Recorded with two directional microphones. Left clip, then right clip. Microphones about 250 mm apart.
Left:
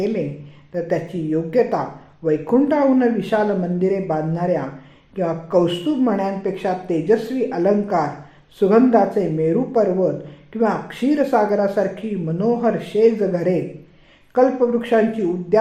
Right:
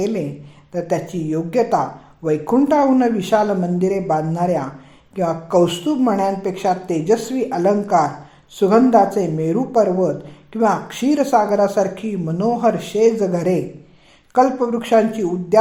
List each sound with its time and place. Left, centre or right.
0.7 s speech: right